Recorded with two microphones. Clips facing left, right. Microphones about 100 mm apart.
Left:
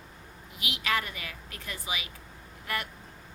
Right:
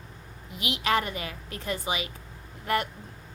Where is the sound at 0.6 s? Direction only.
25° right (ahead or behind).